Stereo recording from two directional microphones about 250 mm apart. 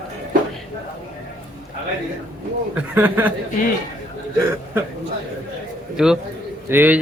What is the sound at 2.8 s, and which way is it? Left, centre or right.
Speech, centre.